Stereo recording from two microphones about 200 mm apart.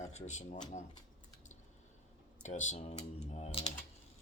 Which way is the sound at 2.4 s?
35° left (ahead or behind).